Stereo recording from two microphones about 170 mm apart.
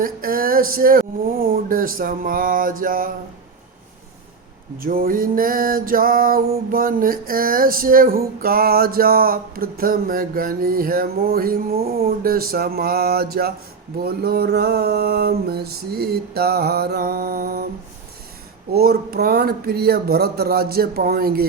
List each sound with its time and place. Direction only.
0.0 s music: 60° right (ahead or behind)
4.8 s music: 55° right (ahead or behind)
18.7 s music: 65° right (ahead or behind)